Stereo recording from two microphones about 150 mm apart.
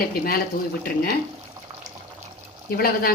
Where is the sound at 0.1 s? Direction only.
80° left.